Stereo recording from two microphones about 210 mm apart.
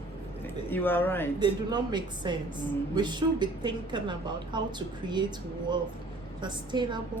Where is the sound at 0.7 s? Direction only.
10° left (ahead or behind).